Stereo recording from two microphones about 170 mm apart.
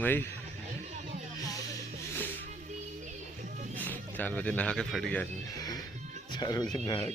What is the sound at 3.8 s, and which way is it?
Speech, 10° left (ahead or behind).